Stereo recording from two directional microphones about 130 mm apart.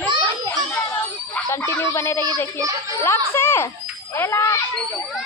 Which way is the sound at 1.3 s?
20° left (ahead or behind).